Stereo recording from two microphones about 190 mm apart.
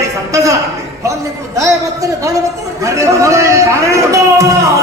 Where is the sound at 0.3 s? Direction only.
15° right (ahead or behind).